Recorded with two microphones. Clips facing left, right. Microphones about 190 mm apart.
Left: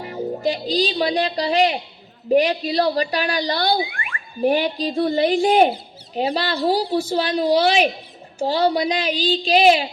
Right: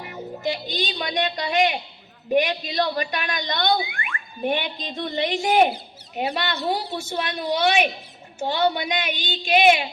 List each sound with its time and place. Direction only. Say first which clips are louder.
0.0 s a woman's voice: left 6 dB; 35° left (ahead or behind)